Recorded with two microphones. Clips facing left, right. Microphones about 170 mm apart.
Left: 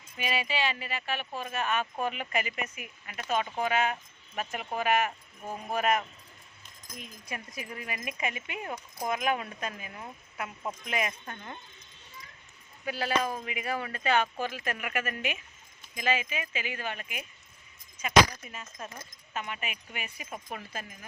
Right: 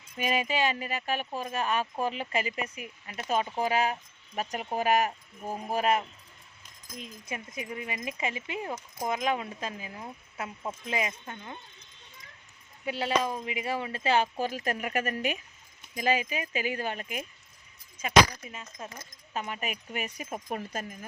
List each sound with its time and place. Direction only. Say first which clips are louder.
0.2 s speech: right 3 dB; 45° right (ahead or behind); by 11.3 s 25° right (ahead or behind)
12.8 s speech: right 1 dB; 25° right (ahead or behind)
18.4 s speech: right 1 dB; 20° right (ahead or behind)
19.3 s speech: right 3 dB; 35° right (ahead or behind)